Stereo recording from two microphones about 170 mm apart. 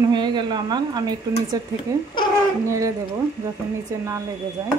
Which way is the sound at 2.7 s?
20° right (ahead or behind).